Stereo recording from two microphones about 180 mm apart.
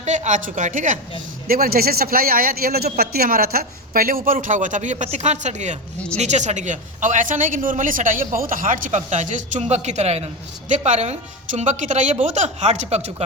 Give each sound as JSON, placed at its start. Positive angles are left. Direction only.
{"t": 0.0, "sound": "a man's voice", "side_deg": -40}